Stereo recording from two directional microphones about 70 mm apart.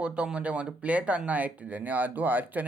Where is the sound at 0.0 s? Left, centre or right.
Centre.